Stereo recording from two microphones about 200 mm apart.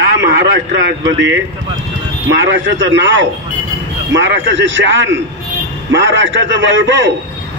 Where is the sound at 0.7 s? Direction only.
75° right (ahead or behind).